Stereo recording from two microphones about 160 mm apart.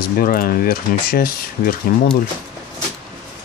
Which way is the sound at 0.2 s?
65° left (ahead or behind).